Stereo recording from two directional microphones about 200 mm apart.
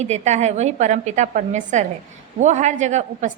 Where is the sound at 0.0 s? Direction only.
35° right (ahead or behind).